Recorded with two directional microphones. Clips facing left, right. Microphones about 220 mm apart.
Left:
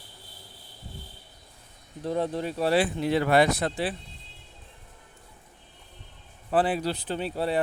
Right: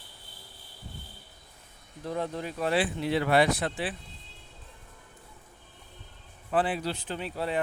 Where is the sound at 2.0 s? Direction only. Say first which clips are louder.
Left 5 dB; 30° left (ahead or behind).